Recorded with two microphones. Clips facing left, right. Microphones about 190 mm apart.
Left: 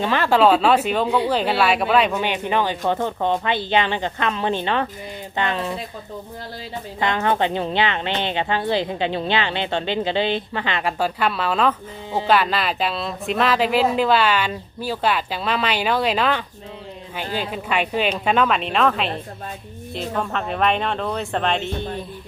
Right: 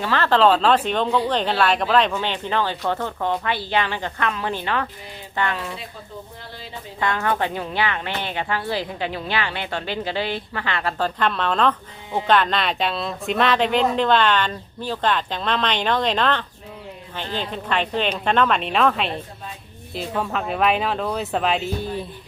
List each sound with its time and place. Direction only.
0.0 s a woman's voice: 15° left (ahead or behind)
7.0 s a woman's voice: 20° left (ahead or behind); by 22.0 s 5° right (ahead or behind)